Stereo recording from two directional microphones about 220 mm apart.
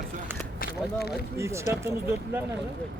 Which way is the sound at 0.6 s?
45° left (ahead or behind).